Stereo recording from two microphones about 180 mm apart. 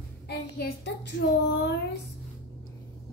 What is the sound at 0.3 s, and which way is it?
Speech, 70° left (ahead or behind).